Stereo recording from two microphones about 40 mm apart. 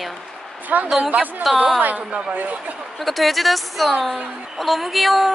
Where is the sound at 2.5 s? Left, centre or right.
Right.